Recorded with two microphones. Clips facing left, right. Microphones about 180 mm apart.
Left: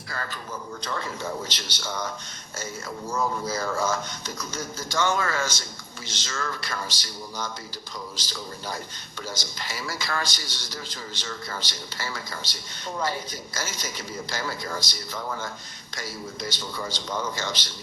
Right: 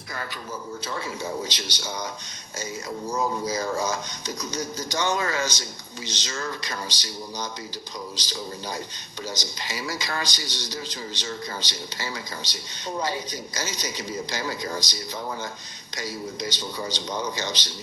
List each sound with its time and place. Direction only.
0.9 s speech: 10° right (ahead or behind)
3.1 s speech: 15° right (ahead or behind)